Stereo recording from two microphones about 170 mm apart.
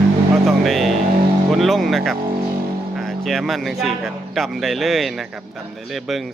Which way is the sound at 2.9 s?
Centre (ahead or behind).